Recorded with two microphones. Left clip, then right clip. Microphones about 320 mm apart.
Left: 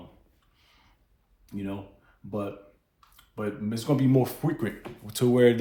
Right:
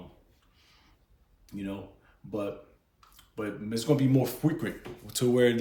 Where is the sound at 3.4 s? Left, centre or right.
Centre.